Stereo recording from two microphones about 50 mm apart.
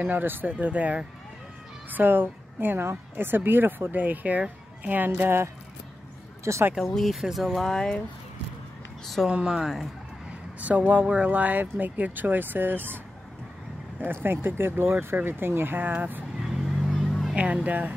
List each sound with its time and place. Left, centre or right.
0.0 s a woman's voice: right
6.5 s speech: right
7.0 s speech: centre
9.0 s speech: centre
9.3 s a woman's voice: centre
10.6 s speech: right
14.2 s speech: right
16.4 s vehicle: centre
17.6 s speech: right